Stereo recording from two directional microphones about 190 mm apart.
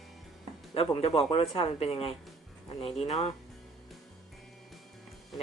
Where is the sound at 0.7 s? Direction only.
30° left (ahead or behind).